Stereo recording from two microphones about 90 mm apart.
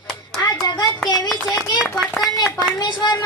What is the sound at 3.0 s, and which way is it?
Speech, 55° left (ahead or behind).